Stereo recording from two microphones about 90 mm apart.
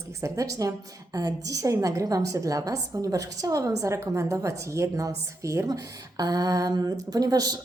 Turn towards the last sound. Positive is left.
turn(degrees=-45)  # may be behind; listen again after turning